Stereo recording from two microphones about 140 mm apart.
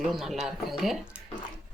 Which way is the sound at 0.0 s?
Centre (ahead or behind).